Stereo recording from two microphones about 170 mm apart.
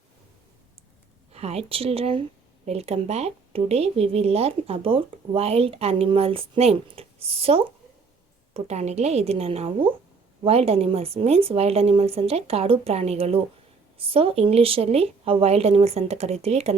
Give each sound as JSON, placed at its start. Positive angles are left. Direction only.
{"t": 1.3, "sound": "speech", "side_deg": -40}